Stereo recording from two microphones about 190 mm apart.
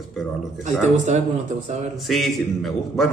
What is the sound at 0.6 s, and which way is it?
Speech, 40° right (ahead or behind).